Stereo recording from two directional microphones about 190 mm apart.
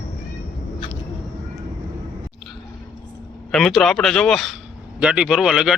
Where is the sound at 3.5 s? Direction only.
Centre (ahead or behind).